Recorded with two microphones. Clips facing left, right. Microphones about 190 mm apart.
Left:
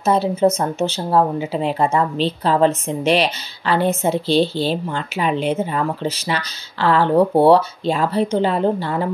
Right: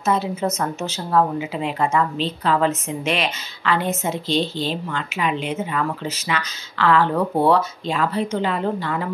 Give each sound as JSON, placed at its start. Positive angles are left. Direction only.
{"t": 0.0, "sound": "speech", "side_deg": 30}
{"t": 4.3, "sound": "a woman's voice", "side_deg": 5}
{"t": 4.8, "sound": "speech", "side_deg": 35}